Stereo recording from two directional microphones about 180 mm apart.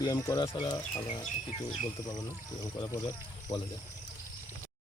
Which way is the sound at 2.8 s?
20° left (ahead or behind).